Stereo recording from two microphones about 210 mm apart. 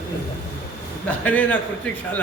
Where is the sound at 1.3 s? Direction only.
5° left (ahead or behind).